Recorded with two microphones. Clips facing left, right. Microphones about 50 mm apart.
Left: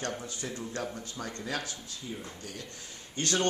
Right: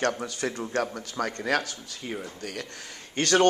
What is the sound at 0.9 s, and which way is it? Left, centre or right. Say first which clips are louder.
Speech: right 8 dB; right.